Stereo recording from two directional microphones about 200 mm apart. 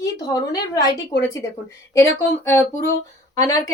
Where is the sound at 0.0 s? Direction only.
20° left (ahead or behind).